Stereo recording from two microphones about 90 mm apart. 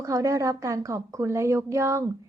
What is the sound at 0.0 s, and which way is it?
A woman's voice, 40° right (ahead or behind).